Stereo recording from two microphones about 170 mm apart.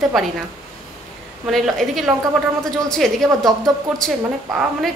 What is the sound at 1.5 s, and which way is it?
A woman's voice, centre (ahead or behind).